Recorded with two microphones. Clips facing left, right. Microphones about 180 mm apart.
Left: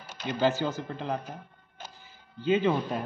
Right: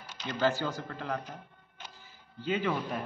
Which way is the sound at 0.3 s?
15° left (ahead or behind).